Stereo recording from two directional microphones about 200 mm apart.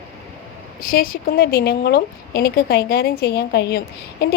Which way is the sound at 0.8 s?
45° left (ahead or behind).